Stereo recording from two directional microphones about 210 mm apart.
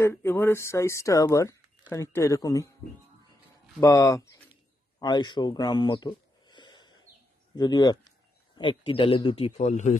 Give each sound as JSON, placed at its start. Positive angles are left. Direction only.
{"t": 0.0, "sound": "speech", "side_deg": 10}
{"t": 3.8, "sound": "speech", "side_deg": 15}
{"t": 4.9, "sound": "a sound", "side_deg": 20}
{"t": 7.5, "sound": "speech", "side_deg": 20}